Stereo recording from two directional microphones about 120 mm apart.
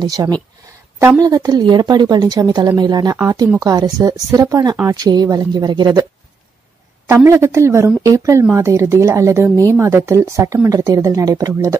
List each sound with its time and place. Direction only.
0.0 s a woman's voice: 35° right (ahead or behind)
7.1 s speech: 25° right (ahead or behind)